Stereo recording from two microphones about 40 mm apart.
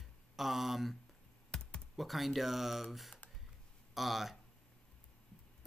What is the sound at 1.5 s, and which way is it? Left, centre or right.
Computer keyboard, left.